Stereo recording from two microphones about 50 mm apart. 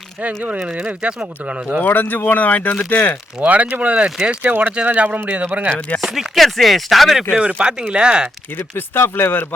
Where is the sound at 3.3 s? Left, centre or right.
Right.